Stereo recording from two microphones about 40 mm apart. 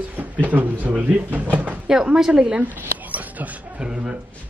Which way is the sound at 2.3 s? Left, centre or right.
Right.